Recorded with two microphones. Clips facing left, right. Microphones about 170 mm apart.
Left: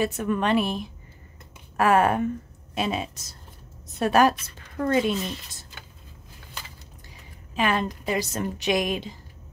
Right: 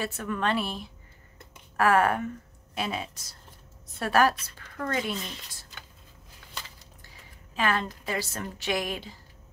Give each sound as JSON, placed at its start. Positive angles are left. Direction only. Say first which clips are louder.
{"t": 0.0, "sound": "a woman's voice", "louder": "left 5 dB", "side_deg": 15}
{"t": 7.5, "sound": "a woman's voice", "louder": "left 3 dB", "side_deg": 20}